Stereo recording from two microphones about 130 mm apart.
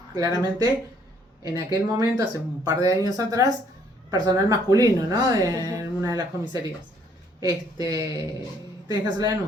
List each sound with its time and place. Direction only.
0.1 s speech: 30° right (ahead or behind)